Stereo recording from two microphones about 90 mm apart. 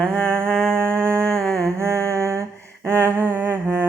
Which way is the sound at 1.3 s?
5° left (ahead or behind).